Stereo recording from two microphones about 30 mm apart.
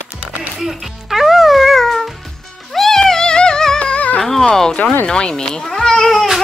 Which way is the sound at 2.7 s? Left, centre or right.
Centre.